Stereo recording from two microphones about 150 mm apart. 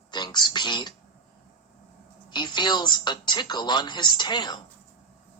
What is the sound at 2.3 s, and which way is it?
Speech, 30° left (ahead or behind).